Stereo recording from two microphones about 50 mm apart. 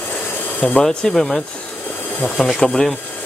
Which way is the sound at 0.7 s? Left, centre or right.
Centre.